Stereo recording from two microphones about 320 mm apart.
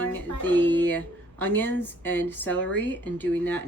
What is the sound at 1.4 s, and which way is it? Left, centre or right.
A woman's voice, centre.